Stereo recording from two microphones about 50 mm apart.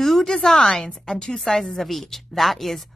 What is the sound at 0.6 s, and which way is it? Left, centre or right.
Speech, left.